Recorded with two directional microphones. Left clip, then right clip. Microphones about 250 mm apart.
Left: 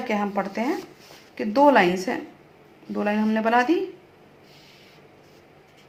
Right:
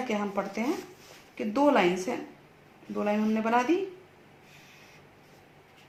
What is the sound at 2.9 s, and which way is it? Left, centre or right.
Speech, left.